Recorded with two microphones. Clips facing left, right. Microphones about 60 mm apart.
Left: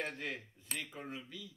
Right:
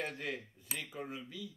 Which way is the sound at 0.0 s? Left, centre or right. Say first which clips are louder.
Right 1 dB; centre.